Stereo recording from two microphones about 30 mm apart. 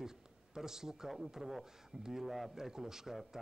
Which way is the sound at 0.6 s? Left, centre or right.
Centre.